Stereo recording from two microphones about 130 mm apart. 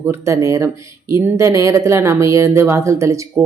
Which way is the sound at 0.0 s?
20° right (ahead or behind).